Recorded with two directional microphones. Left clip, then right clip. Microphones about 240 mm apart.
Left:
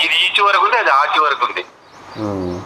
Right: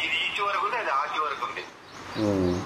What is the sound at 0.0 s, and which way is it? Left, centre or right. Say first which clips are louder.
A man's voice: left 13 dB; left.